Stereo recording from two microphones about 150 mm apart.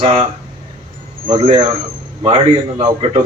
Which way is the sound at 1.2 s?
35° right (ahead or behind).